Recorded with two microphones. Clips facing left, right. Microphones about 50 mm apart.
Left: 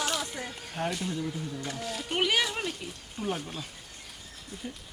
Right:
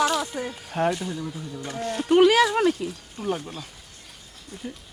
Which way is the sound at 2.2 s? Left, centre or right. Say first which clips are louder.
Right 10 dB; right.